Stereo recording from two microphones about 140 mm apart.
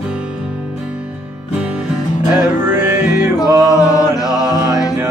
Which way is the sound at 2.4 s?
15° right (ahead or behind).